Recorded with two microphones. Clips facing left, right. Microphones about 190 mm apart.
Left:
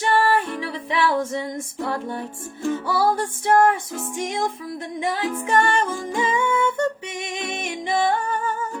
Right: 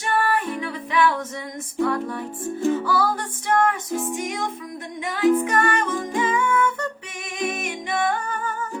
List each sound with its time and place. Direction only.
0.1 s music: 30° left (ahead or behind)